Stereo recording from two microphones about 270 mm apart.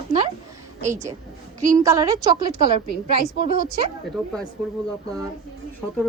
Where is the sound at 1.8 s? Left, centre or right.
Centre.